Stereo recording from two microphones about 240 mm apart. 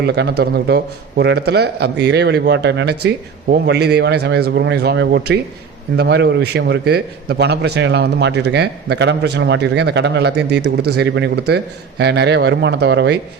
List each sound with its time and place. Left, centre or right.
0.0 s a man's voice: right